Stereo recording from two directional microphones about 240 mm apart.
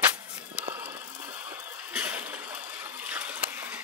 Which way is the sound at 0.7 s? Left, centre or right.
Centre.